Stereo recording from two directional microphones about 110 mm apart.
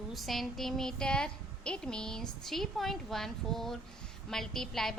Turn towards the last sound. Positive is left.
turn(degrees=5)  # may be behind; listen again after turning